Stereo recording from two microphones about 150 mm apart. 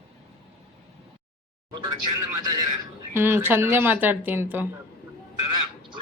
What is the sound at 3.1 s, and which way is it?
Speech, 15° right (ahead or behind).